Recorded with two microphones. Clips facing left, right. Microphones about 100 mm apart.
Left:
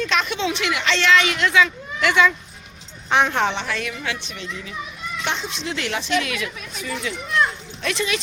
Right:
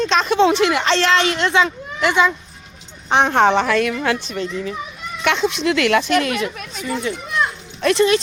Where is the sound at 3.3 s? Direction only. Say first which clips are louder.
Right 8 dB; 40° right (ahead or behind).